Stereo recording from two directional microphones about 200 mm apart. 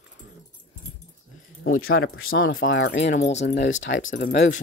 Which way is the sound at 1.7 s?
90° left.